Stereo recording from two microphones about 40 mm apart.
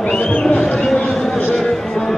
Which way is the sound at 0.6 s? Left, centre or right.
Left.